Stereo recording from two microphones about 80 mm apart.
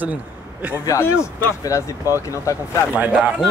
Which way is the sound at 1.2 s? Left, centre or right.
Left.